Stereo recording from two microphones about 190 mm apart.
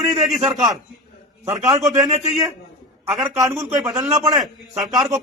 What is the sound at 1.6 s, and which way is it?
Speech, 20° right (ahead or behind).